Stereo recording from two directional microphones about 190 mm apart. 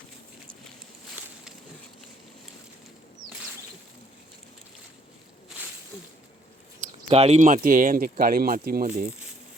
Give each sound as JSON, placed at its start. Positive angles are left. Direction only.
{"t": 7.1, "sound": "speech", "side_deg": -35}